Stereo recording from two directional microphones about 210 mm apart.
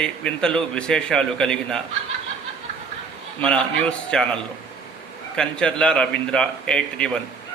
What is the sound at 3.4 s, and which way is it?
A man's voice, 5° left (ahead or behind).